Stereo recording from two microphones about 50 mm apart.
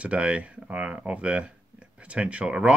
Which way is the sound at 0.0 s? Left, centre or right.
Right.